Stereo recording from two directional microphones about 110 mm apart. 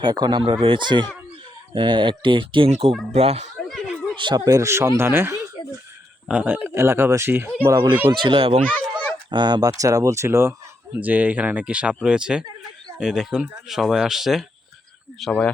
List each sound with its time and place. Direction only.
0.0 s speech: 40° right (ahead or behind)
2.6 s speech: 85° right
3.7 s a sound: 10° left (ahead or behind)
4.2 s speech: 45° right (ahead or behind); by 7.7 s 20° right (ahead or behind)
7.7 s speech: 40° right (ahead or behind); by 8.6 s 55° right (ahead or behind)
9.3 s speech: 40° right (ahead or behind); by 15.3 s centre (ahead or behind)